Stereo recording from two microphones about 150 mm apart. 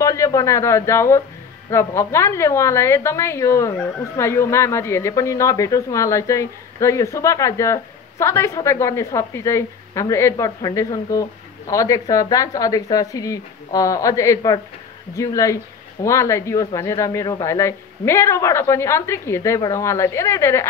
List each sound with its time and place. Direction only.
0.0 s a woman's voice: 20° left (ahead or behind)